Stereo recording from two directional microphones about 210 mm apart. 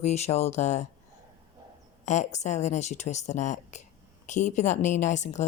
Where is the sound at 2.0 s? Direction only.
35° left (ahead or behind).